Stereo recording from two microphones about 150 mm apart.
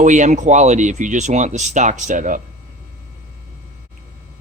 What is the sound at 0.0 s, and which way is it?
Speech, 55° right (ahead or behind).